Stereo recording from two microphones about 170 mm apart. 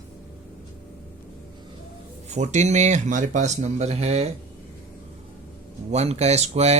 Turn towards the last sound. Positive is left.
turn(degrees=-40)  # may be behind; listen again after turning